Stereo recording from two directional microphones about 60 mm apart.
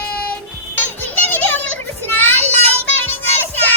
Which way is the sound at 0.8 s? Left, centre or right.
Left.